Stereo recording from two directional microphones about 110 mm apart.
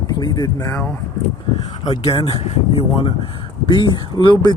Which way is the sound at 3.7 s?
45° left (ahead or behind).